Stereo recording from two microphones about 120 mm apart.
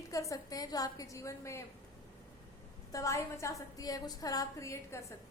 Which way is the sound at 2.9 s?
25° left (ahead or behind).